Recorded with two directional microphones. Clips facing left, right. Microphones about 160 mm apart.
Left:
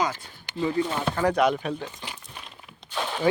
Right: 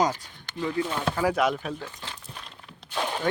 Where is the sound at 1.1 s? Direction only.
5° right (ahead or behind).